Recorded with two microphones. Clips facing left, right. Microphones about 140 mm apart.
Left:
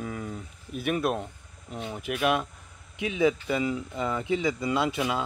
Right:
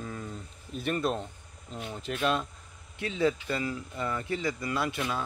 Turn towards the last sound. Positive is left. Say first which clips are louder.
# left 5 dB
turn(degrees=20)  # may be behind; listen again after turning